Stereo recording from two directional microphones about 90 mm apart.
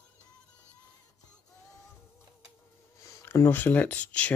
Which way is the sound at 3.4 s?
20° left (ahead or behind).